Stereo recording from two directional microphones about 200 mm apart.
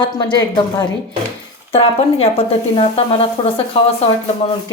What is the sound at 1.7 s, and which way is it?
Speech, 30° left (ahead or behind).